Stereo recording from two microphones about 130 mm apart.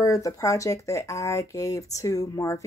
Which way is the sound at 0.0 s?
25° left (ahead or behind).